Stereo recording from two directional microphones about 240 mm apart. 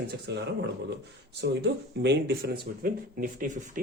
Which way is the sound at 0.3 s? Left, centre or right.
Right.